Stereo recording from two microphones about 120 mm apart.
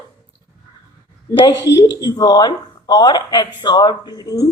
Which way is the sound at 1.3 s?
25° left (ahead or behind).